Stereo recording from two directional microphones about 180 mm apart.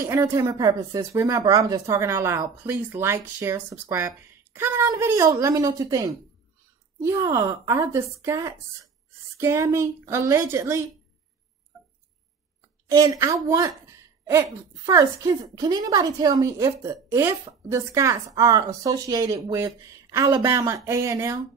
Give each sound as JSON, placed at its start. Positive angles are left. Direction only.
{"t": 0.0, "sound": "speech", "side_deg": -15}
{"t": 12.8, "sound": "a woman's voice", "side_deg": -20}